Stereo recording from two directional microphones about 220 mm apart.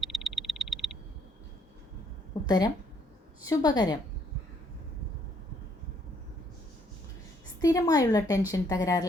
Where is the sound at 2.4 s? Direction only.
15° left (ahead or behind).